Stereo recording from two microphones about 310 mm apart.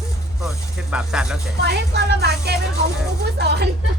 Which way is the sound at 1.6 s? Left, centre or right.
Right.